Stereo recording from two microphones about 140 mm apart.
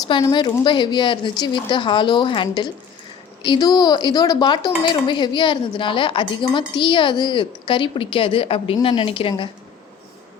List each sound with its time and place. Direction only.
0.3 s a woman's voice: 35° left (ahead or behind)